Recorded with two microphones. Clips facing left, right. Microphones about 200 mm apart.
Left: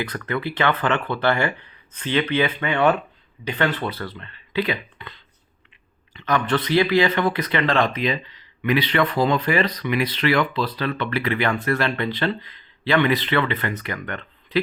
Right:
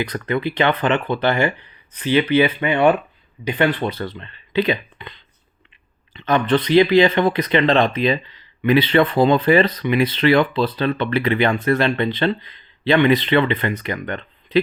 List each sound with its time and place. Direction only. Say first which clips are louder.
0.0 s speech: right 4 dB; 20° right (ahead or behind)